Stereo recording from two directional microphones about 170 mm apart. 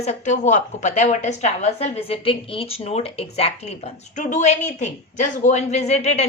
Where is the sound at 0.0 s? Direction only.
40° left (ahead or behind).